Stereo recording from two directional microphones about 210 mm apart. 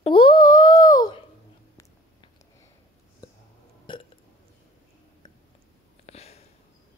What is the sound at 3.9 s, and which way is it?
Burping, 20° left (ahead or behind).